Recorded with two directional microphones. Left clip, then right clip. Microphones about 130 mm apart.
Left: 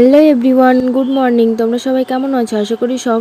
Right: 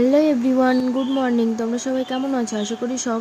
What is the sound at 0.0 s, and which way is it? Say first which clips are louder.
Speech: left 9 dB; 40° left (ahead or behind).